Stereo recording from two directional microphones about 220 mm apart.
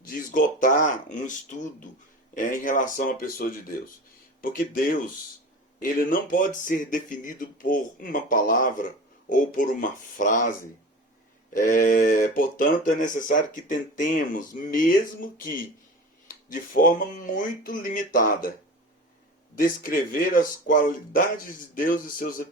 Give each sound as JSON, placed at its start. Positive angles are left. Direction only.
{"t": 0.1, "sound": "speech", "side_deg": 40}
{"t": 11.5, "sound": "speech", "side_deg": 40}
{"t": 19.5, "sound": "speech", "side_deg": 40}